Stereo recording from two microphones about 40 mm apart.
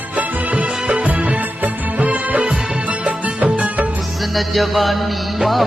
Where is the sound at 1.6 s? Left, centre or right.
Right.